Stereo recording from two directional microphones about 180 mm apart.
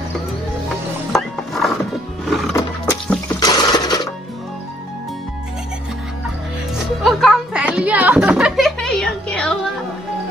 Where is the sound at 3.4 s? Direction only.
20° left (ahead or behind).